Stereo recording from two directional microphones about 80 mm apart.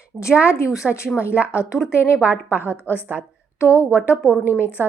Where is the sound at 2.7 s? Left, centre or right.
Left.